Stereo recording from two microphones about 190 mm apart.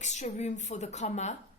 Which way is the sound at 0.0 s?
40° left (ahead or behind).